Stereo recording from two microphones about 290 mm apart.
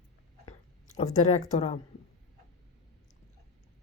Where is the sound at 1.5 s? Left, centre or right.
Left.